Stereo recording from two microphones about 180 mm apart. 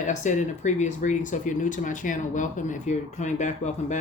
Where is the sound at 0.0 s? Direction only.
45° left (ahead or behind).